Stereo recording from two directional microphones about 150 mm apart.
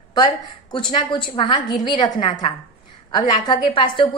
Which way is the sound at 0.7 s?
30° left (ahead or behind).